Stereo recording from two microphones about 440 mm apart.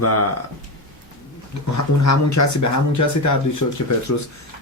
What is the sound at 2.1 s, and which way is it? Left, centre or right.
Speech, left.